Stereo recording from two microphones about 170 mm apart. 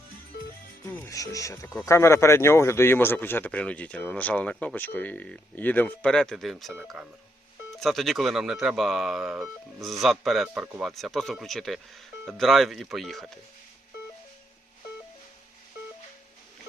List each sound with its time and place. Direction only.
0.9 s speech: 15° left (ahead or behind)